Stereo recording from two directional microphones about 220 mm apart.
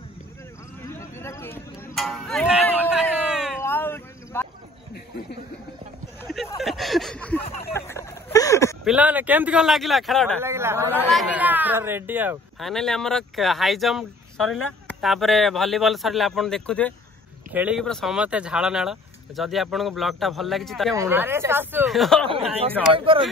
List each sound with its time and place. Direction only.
0.8 s music: 10° left (ahead or behind)
3.3 s a sound: 5° right (ahead or behind)
3.6 s cricket: 10° left (ahead or behind)
6.6 s a sound: centre (ahead or behind)
8.8 s speech: 5° right (ahead or behind)
10.4 s speech: 10° right (ahead or behind); by 16.9 s 5° left (ahead or behind)
17.5 s speech: 5° right (ahead or behind)
20.9 s speech: 10° right (ahead or behind)
22.9 s speech: 25° right (ahead or behind)